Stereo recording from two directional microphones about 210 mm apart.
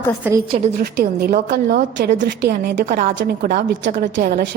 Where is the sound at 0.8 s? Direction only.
45° right (ahead or behind).